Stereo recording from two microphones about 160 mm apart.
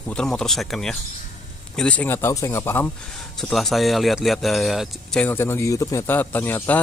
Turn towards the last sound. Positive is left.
turn(degrees=10)  # may be behind; listen again after turning